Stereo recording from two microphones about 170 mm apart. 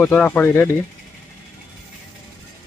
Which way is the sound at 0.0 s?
10° left (ahead or behind).